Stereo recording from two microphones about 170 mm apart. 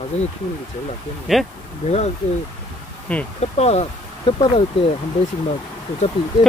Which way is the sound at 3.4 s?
40° left (ahead or behind).